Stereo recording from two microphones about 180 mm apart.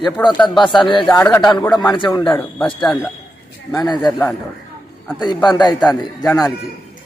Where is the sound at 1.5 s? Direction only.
25° left (ahead or behind).